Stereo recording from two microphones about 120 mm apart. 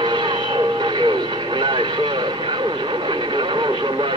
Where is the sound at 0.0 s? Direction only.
40° right (ahead or behind).